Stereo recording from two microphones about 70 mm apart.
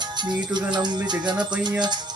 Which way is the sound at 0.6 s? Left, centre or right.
Right.